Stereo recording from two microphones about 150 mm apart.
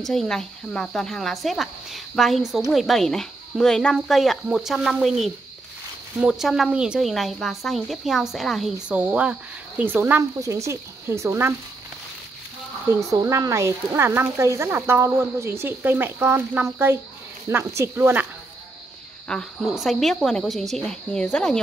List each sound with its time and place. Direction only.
0.0 s speech: centre (ahead or behind); by 11.5 s 15° right (ahead or behind)
12.8 s speech: 20° right (ahead or behind)
19.2 s speech: 5° left (ahead or behind)